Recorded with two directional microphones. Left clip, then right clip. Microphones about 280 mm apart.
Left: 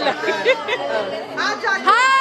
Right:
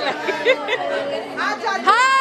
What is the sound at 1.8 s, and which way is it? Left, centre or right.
Speech, centre.